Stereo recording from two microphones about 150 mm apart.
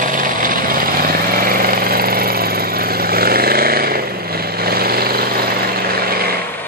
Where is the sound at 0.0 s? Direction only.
65° right (ahead or behind); by 6.4 s 90° right.